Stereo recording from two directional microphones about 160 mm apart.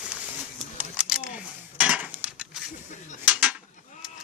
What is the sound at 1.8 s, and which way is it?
Cutlery, 5° right (ahead or behind).